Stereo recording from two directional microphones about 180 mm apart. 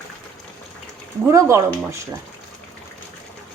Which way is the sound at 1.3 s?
15° right (ahead or behind).